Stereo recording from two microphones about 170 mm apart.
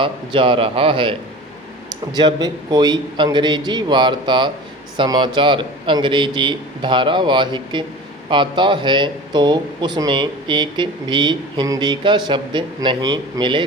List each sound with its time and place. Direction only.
0.0 s a man's voice: 30° right (ahead or behind)
2.1 s speech: 25° right (ahead or behind)